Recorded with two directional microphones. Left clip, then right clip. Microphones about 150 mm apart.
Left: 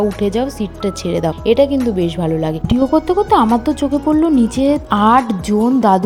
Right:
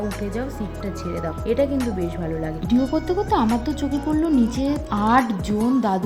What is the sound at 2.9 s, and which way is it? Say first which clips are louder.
A woman's voice: left 13 dB; 25° left (ahead or behind).